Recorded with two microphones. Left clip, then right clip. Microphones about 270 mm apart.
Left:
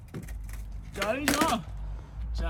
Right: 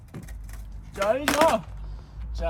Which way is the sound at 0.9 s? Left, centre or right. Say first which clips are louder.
Right 5 dB; centre.